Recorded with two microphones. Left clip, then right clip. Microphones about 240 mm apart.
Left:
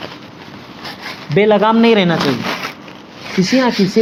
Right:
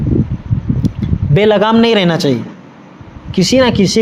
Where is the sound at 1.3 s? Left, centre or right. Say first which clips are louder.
Right 1 dB; right.